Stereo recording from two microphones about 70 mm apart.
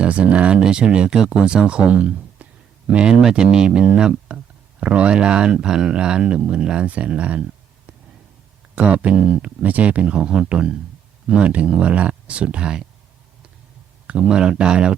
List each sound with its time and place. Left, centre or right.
0.0 s speech: centre
8.7 s speech: centre
14.1 s speech: centre